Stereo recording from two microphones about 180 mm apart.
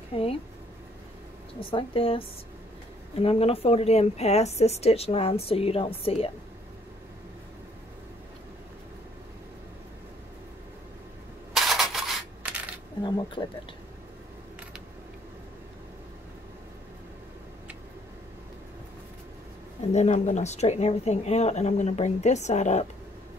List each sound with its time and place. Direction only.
0.1 s speech: 35° left (ahead or behind)
1.6 s a woman's voice: 30° left (ahead or behind)
11.5 s a sound: centre (ahead or behind)
13.0 s speech: 25° left (ahead or behind)
19.9 s a woman's voice: 40° left (ahead or behind)